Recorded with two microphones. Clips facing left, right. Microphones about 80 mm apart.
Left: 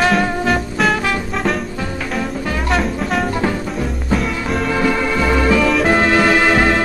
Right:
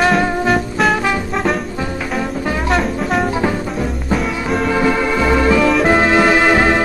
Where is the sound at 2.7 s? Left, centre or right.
Centre.